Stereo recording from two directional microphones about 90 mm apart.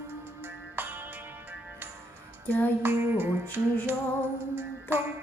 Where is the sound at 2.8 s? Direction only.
25° right (ahead or behind).